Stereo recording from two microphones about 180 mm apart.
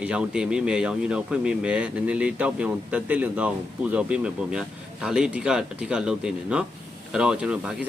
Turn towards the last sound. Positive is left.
turn(degrees=-5)  # may be behind; listen again after turning